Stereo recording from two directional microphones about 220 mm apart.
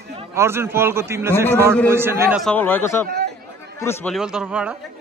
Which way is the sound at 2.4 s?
5° left (ahead or behind).